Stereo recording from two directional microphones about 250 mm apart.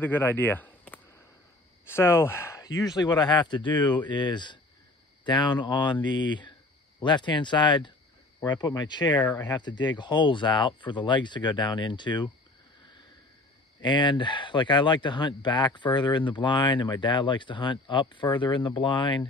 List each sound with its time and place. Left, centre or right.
0.0 s speech: centre
9.6 s speech: centre
13.7 s speech: centre